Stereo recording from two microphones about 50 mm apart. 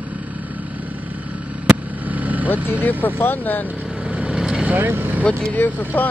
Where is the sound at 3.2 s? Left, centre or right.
Left.